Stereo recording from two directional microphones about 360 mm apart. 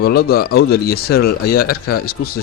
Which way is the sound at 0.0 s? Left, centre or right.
Left.